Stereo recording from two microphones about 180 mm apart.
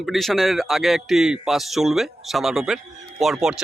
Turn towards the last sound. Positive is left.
turn(degrees=0)  # may be behind; listen again after turning